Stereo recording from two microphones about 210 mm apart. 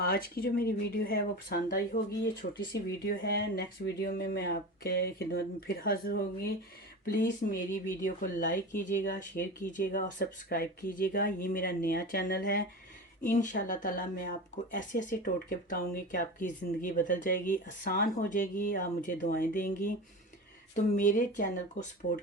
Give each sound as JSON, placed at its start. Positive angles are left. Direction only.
{"t": 0.0, "sound": "speech", "side_deg": 45}